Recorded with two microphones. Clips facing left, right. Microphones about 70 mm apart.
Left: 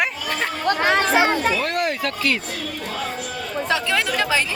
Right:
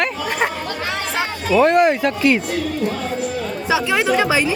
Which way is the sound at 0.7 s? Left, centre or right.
Left.